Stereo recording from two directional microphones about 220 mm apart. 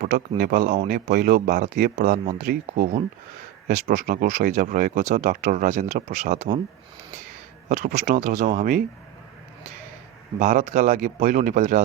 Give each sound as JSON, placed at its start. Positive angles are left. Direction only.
{"t": 0.0, "sound": "speech", "side_deg": -40}
{"t": 7.7, "sound": "speech", "side_deg": -40}
{"t": 10.4, "sound": "speech", "side_deg": -35}